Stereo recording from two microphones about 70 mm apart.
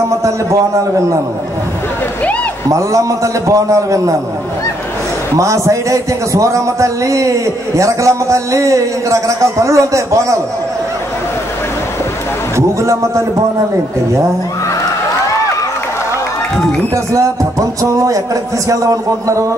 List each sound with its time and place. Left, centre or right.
2.7 s a man's voice: right
5.4 s a man's voice: right
12.5 s a man's voice: right
16.9 s a man's voice: right